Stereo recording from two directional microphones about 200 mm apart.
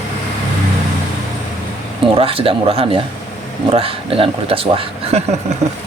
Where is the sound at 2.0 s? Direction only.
25° right (ahead or behind).